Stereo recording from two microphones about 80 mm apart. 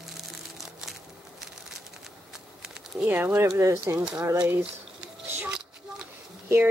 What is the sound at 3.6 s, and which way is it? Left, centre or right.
Speech, right.